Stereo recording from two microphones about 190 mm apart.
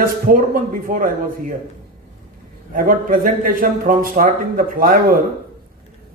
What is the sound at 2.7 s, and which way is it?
A man's voice, 45° right (ahead or behind).